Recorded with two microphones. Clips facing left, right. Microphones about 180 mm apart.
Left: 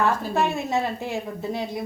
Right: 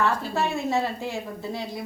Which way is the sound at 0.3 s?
20° left (ahead or behind).